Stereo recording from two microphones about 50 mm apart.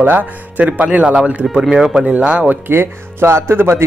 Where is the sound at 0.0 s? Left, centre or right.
Right; by 2.0 s centre.